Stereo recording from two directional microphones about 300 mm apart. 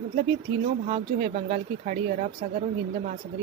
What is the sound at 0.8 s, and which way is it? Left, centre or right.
Speech, right.